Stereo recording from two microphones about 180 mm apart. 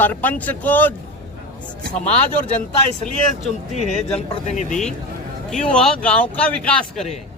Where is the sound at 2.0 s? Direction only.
35° left (ahead or behind).